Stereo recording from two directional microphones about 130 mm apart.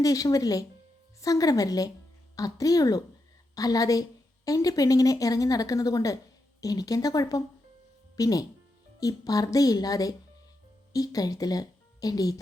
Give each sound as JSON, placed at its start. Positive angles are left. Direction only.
{"t": 0.0, "sound": "speech", "side_deg": 25}